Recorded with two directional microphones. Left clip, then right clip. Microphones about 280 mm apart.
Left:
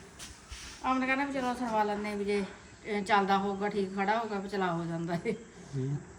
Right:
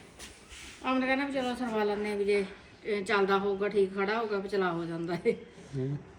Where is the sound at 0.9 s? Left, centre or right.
Centre.